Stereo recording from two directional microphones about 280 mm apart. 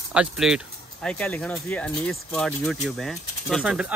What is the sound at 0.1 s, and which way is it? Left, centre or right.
Speech, centre.